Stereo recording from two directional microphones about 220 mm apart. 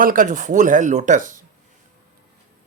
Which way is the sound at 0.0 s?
40° right (ahead or behind).